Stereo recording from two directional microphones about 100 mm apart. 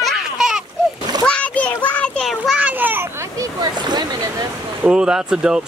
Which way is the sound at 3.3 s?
45° right (ahead or behind).